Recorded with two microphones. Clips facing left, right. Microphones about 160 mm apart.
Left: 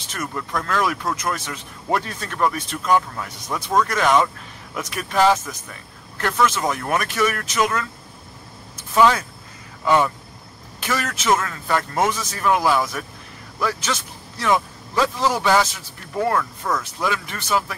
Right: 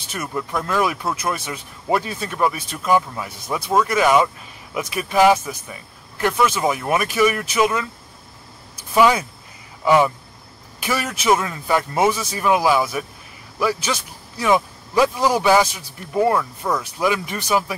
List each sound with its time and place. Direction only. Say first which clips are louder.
0.1 s speech: right 2 dB; 10° right (ahead or behind)
8.7 s a sound: right 1 dB; 10° right (ahead or behind)
9.8 s speech: right 3 dB; 10° right (ahead or behind)